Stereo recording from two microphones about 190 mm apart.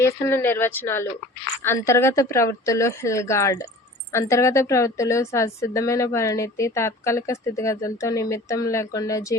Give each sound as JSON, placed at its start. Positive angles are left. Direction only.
{"t": 0.0, "sound": "a woman's voice", "side_deg": 15}